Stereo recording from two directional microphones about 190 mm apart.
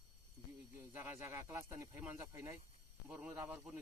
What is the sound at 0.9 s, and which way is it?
Speech, 15° right (ahead or behind).